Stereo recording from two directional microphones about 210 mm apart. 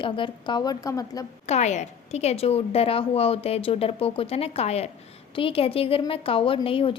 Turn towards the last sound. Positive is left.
turn(degrees=25)  # may be behind; listen again after turning